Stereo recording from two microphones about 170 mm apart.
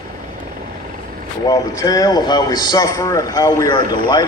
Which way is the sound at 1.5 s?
20° left (ahead or behind).